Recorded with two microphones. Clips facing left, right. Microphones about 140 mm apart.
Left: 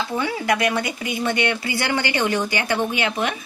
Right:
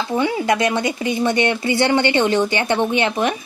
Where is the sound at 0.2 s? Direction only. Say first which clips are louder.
Right 4 dB; 25° right (ahead or behind).